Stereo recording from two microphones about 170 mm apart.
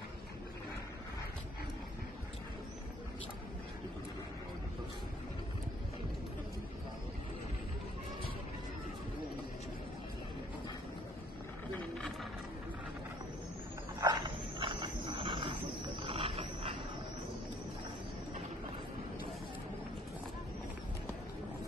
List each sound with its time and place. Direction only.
14.0 s wild animals: 25° right (ahead or behind)